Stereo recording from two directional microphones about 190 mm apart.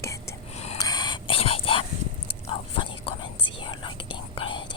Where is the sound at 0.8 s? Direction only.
20° left (ahead or behind).